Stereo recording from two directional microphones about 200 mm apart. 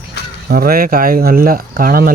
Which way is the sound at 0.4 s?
45° right (ahead or behind).